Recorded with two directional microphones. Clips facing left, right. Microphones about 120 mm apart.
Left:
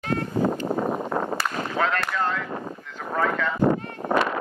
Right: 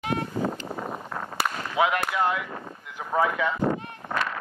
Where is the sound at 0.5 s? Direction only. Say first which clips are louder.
Left 8 dB; 45° left (ahead or behind).